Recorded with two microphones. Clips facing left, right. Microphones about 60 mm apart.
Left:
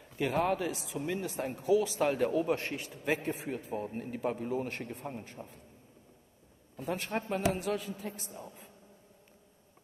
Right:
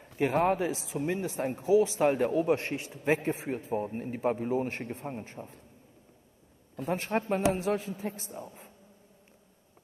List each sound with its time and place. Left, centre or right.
0.0 s a sound: right
0.5 s speech: right
6.8 s speech: right